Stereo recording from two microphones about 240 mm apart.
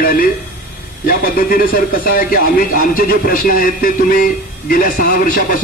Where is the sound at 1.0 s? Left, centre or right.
Left.